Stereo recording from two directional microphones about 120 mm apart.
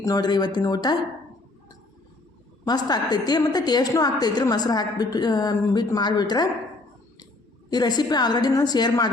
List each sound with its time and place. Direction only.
0.0 s a woman's voice: 35° left (ahead or behind)
2.6 s a woman's voice: 35° left (ahead or behind)
7.7 s a woman's voice: 35° left (ahead or behind)